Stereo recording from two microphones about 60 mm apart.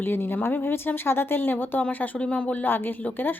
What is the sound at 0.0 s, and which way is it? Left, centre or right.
A woman's voice, left.